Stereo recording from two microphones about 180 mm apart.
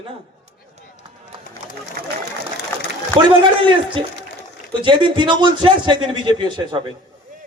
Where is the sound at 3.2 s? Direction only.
30° right (ahead or behind).